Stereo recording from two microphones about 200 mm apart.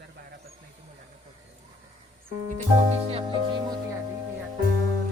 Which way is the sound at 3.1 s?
25° right (ahead or behind).